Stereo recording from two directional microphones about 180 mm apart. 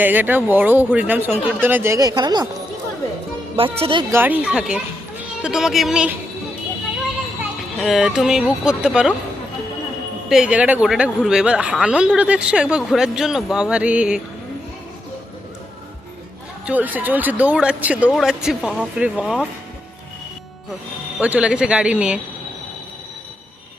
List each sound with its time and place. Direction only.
0.0 s speech: 10° right (ahead or behind)
3.5 s speech: 30° right (ahead or behind)
4.1 s speech: 10° right (ahead or behind)
7.8 s speech: centre (ahead or behind)
10.2 s speech: 5° right (ahead or behind)
16.6 s speech: 10° right (ahead or behind)
21.2 s speech: 5° right (ahead or behind)